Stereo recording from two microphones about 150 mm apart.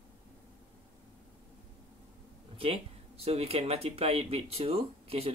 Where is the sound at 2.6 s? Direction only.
40° right (ahead or behind).